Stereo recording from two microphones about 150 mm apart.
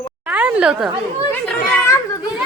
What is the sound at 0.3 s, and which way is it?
Speech, 10° right (ahead or behind).